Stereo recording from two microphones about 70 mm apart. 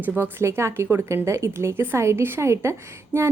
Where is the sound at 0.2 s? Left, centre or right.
Right.